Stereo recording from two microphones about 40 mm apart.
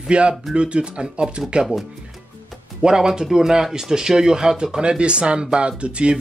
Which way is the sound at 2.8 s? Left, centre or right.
Centre.